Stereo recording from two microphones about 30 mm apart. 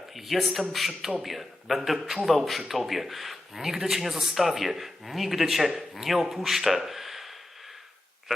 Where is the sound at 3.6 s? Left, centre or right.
Centre.